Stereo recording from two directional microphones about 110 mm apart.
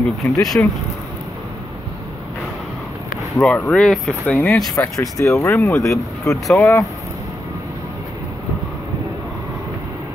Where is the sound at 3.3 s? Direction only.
10° left (ahead or behind).